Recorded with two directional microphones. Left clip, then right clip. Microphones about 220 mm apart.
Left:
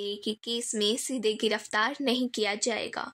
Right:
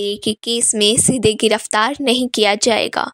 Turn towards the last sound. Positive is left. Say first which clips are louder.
# right 15 dB
turn(degrees=-40)  # may be behind; listen again after turning